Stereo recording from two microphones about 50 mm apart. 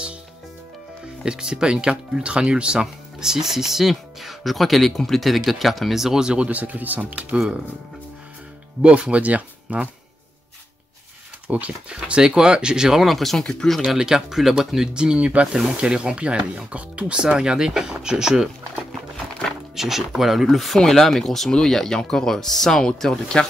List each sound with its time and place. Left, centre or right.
1.2 s speech: centre; by 7.3 s right
7.3 s speech: centre
8.8 s speech: right
11.5 s speech: right
13.0 s speech: centre
13.8 s speech: centre
19.7 s speech: centre